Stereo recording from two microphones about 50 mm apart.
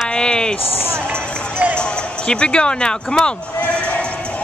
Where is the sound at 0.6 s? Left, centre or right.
Left.